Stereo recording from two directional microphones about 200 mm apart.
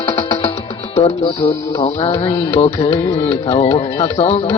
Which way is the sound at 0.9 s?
30° left (ahead or behind).